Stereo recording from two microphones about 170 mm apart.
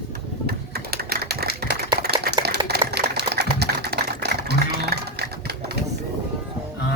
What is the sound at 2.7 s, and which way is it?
Typewriter, 70° right (ahead or behind).